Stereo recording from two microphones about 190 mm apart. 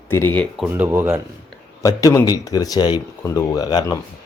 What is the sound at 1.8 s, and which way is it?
Speech, 15° left (ahead or behind).